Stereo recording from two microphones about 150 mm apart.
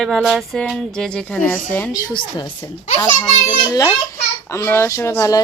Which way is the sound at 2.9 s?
30° left (ahead or behind).